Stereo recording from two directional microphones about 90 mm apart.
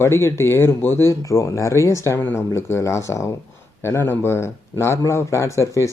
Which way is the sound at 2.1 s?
20° left (ahead or behind).